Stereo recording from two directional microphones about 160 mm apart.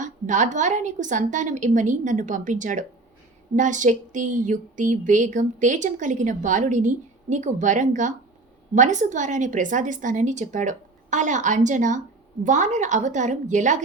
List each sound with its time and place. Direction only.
0.0 s a woman's voice: 50° right (ahead or behind)